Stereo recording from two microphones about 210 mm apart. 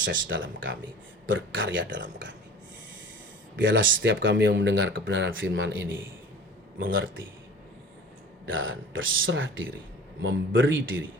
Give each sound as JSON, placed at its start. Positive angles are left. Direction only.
{"t": 0.3, "sound": "speech", "side_deg": -65}
{"t": 3.5, "sound": "speech", "side_deg": -65}
{"t": 8.4, "sound": "speech", "side_deg": -65}